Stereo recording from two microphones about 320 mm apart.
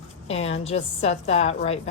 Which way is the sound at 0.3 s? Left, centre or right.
Centre.